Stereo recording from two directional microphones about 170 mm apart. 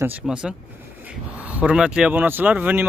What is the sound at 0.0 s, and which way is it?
Speech, 5° right (ahead or behind).